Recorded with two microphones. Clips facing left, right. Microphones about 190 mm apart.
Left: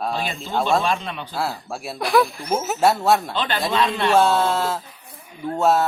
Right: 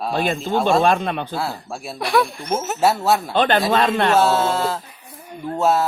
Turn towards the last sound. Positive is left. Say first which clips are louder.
# even
turn(degrees=0)  # may be behind; listen again after turning